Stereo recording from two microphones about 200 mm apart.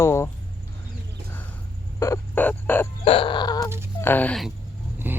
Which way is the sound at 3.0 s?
25° left (ahead or behind).